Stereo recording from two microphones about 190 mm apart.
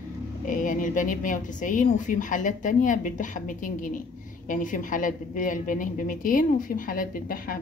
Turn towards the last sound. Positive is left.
turn(degrees=45)  # may be behind; listen again after turning